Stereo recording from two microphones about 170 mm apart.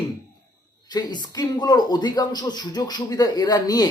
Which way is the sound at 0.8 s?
25° left (ahead or behind).